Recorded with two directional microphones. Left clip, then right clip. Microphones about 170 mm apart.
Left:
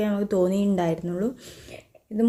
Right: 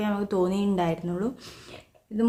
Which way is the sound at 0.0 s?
15° left (ahead or behind).